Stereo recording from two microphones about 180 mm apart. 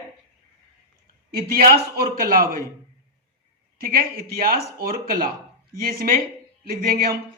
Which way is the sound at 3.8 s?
55° right (ahead or behind).